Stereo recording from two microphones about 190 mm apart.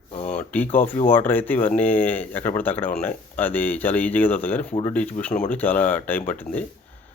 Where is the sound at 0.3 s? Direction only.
10° left (ahead or behind).